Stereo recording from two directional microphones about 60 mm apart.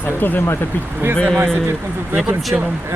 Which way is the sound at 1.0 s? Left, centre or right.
Right.